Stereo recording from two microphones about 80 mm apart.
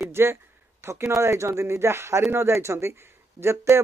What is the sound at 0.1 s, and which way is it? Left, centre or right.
Speech, right.